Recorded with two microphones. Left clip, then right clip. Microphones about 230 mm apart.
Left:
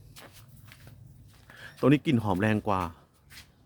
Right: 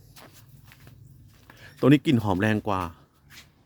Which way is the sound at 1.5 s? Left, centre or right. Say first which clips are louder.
Left 4 dB; centre.